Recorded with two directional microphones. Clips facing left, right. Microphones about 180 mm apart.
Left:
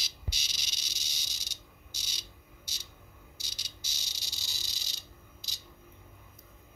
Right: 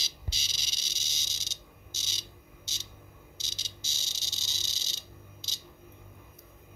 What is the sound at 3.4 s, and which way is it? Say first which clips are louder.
Insect: right 3 dB; 25° right (ahead or behind).